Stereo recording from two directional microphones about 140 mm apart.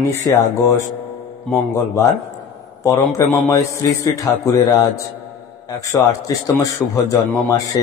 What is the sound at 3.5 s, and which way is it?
A man's voice, 25° left (ahead or behind).